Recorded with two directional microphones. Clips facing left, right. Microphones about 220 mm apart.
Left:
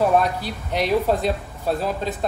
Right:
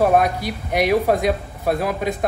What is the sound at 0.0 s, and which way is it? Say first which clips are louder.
Speech: right 2 dB; 10° right (ahead or behind).